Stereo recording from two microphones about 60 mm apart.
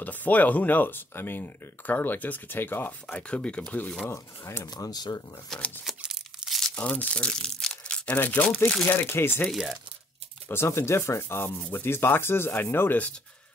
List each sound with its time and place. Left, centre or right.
0.0 s speech: left
3.1 s speech: centre
4.1 s speech: left
4.7 s speech: left
5.5 s speech: centre
5.9 s tearing: centre
6.7 s speech: left
9.5 s speech: centre
10.5 s speech: left